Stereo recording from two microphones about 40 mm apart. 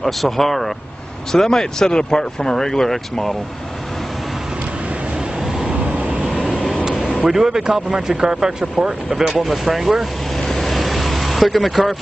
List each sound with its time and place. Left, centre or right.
0.0 s speech: centre
1.3 s speech: centre
5.7 s vehicle: right
6.4 s vehicle: left
7.2 s a man's voice: centre
9.4 s speech: centre
10.6 s vehicle: centre